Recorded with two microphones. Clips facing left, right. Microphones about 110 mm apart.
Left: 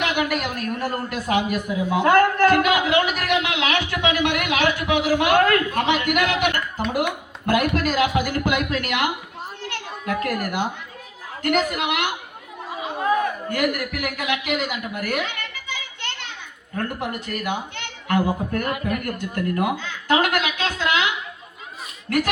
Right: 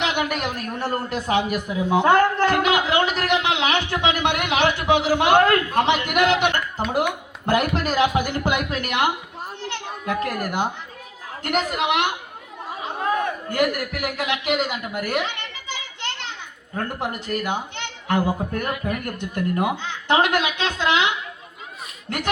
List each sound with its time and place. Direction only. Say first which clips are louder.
0.0 s a man's voice: left 1 dB; 25° right (ahead or behind)
13.5 s a man's voice: right 1 dB; 30° right (ahead or behind)